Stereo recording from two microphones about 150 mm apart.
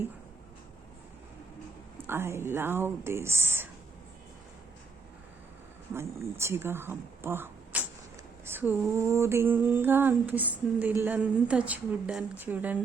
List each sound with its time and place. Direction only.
2.0 s female singing: 15° right (ahead or behind)
5.9 s speech: 15° right (ahead or behind)
8.4 s female singing: 10° right (ahead or behind)